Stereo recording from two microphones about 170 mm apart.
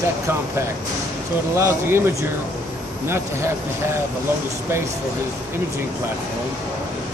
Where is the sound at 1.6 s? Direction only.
15° right (ahead or behind).